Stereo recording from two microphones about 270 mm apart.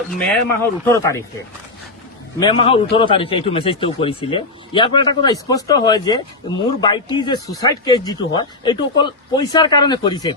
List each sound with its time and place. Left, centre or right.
0.1 s a man's voice: centre
2.4 s a man's voice: centre